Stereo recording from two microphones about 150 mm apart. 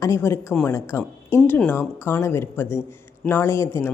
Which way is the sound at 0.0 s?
20° left (ahead or behind).